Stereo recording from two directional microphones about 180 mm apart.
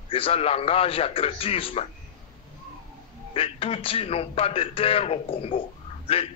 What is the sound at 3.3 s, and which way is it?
Speech, 30° left (ahead or behind).